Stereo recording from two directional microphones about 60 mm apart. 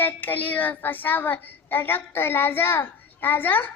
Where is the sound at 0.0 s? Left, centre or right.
Left.